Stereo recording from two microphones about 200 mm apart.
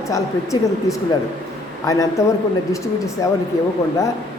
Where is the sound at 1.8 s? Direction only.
15° left (ahead or behind).